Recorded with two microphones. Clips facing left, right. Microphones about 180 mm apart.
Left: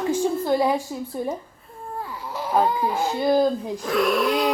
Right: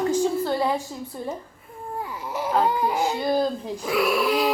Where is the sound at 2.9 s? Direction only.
15° right (ahead or behind).